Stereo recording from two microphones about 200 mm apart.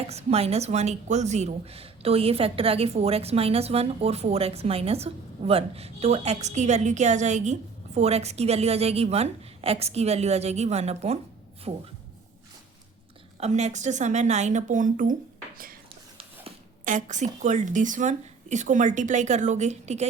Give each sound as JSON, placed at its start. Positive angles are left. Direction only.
{"t": 0.1, "sound": "a woman's voice", "side_deg": -30}
{"t": 13.4, "sound": "a woman's voice", "side_deg": -35}
{"t": 16.8, "sound": "a woman's voice", "side_deg": -40}